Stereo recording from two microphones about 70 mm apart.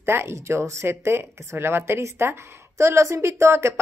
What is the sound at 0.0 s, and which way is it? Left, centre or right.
Speech, right.